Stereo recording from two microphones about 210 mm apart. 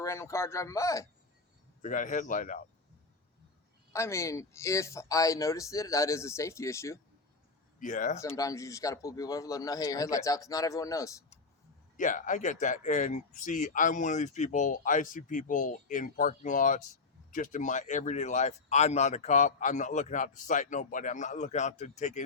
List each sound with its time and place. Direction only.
0.0 s speech: 15° left (ahead or behind)
1.8 s speech: 40° left (ahead or behind)
3.9 s speech: 15° left (ahead or behind)
7.8 s speech: 35° left (ahead or behind)
8.4 s speech: 15° left (ahead or behind)
11.9 s speech: 40° left (ahead or behind)